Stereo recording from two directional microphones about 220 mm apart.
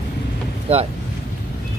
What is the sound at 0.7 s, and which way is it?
Speech, 25° right (ahead or behind).